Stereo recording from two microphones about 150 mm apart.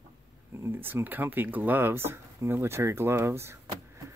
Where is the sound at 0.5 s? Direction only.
15° right (ahead or behind).